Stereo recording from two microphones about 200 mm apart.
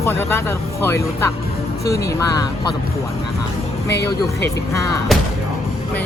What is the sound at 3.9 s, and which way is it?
Speech, 55° left (ahead or behind).